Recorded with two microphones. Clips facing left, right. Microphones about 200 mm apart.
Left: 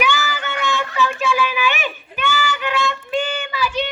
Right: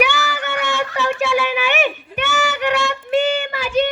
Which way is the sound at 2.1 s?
70° right (ahead or behind).